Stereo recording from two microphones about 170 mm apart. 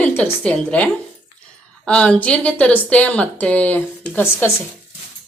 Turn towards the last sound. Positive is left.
turn(degrees=10)  # may be behind; listen again after turning